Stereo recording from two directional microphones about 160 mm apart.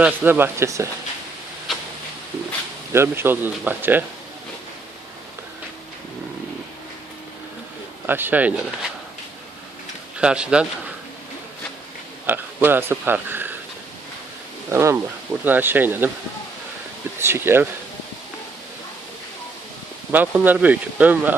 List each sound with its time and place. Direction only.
0.0 s speech: 10° right (ahead or behind)
1.7 s a sound: centre (ahead or behind)
2.9 s speech: 15° right (ahead or behind)
8.0 s speech: 10° right (ahead or behind)
10.2 s speech: 5° right (ahead or behind)
12.2 s speech: 10° right (ahead or behind)
14.7 s speech: 15° right (ahead or behind)
17.2 s speech: 15° right (ahead or behind)
20.1 s speech: 10° right (ahead or behind)